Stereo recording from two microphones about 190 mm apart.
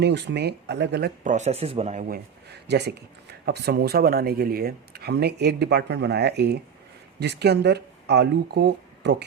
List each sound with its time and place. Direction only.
0.0 s speech: 65° right (ahead or behind)
1.2 s speech: 40° right (ahead or behind); by 9.2 s 65° right (ahead or behind)